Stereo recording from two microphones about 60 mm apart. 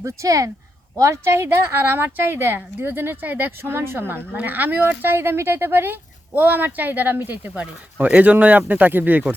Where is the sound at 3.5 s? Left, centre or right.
Right.